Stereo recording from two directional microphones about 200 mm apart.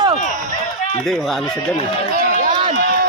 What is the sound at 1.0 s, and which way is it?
Speech, 5° left (ahead or behind).